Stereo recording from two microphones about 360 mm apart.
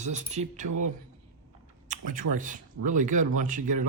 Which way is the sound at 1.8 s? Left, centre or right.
Right.